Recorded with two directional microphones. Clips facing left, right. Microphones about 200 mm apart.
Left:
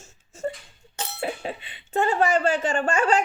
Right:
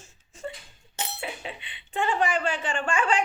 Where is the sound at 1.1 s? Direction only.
45° left (ahead or behind).